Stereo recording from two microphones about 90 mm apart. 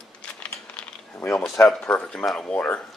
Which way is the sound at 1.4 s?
5° left (ahead or behind).